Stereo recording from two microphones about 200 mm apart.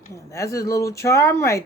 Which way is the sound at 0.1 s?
15° left (ahead or behind).